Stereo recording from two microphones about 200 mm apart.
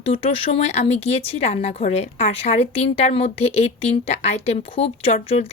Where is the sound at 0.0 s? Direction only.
30° left (ahead or behind).